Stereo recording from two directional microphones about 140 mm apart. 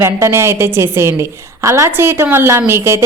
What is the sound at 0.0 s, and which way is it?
A woman's voice, 20° right (ahead or behind).